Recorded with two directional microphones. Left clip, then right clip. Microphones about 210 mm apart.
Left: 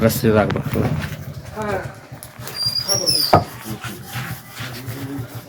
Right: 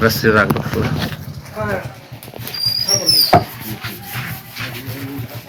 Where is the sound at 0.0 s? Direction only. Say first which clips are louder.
Right 3 dB; 35° left (ahead or behind).